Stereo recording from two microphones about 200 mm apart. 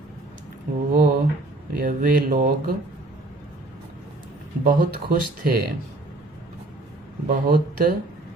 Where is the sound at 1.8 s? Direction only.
45° right (ahead or behind).